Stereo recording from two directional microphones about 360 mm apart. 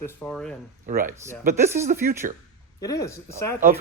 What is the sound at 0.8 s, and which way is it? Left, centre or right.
Speech, right.